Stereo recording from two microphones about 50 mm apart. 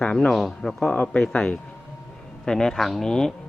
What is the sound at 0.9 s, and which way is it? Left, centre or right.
Speech, left.